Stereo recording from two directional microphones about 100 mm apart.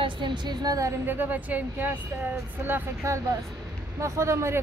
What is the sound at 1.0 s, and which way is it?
Speech, 20° right (ahead or behind).